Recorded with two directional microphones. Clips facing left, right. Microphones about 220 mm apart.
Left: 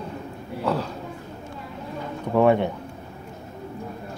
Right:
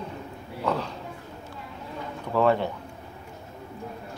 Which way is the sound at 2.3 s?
20° left (ahead or behind).